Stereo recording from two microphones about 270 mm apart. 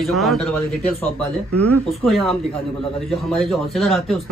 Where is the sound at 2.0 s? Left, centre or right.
Centre.